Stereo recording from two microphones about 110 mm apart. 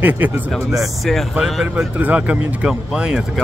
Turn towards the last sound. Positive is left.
turn(degrees=-10)  # may be behind; listen again after turning